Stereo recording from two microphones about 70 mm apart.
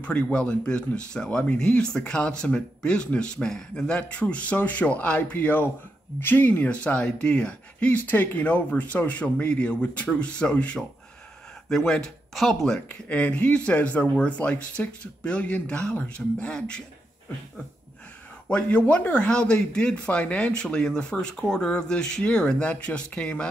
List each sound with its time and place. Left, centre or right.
0.0 s speech: centre
12.8 s speech: left
18.5 s speech: left